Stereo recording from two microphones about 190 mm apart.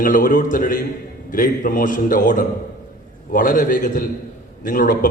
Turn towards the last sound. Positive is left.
turn(degrees=45)  # may be behind; listen again after turning